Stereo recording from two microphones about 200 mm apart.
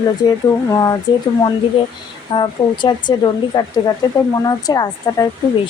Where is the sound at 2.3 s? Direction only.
20° left (ahead or behind).